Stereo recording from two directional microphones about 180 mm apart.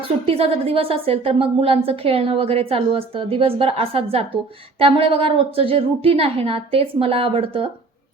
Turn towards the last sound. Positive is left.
turn(degrees=-30)  # may be behind; listen again after turning